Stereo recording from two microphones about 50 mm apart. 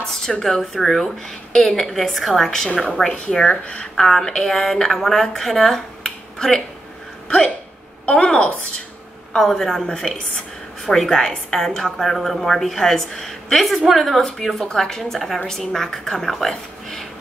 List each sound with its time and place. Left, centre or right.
0.0 s a woman's voice: centre
3.9 s a woman's voice: centre
9.3 s a woman's voice: centre